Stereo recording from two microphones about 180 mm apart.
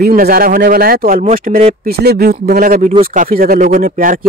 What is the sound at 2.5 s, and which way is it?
Speech, 50° right (ahead or behind).